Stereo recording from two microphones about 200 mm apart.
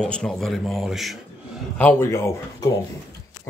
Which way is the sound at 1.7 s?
10° left (ahead or behind).